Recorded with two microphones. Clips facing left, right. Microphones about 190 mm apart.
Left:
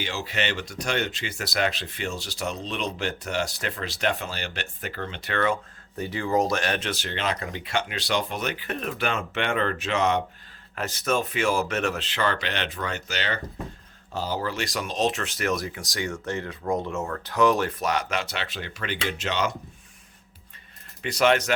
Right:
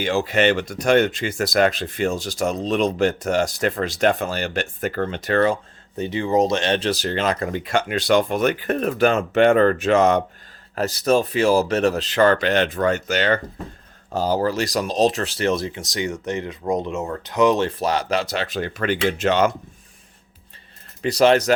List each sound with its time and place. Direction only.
0.0 s speech: 50° right (ahead or behind); by 5.5 s 35° right (ahead or behind)
6.0 s speech: 20° right (ahead or behind); by 19.5 s 50° right (ahead or behind)
21.0 s speech: 35° right (ahead or behind)